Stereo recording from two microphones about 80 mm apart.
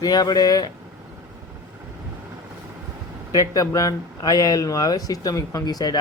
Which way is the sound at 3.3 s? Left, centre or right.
Left.